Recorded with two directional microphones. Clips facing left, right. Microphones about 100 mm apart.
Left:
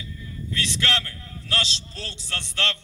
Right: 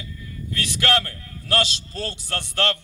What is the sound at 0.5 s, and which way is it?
A man's voice, 50° right (ahead or behind).